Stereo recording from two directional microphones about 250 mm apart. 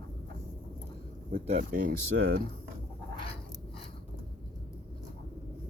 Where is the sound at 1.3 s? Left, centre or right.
Right.